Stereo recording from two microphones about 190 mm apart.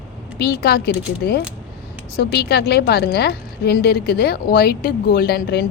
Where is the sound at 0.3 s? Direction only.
60° left (ahead or behind).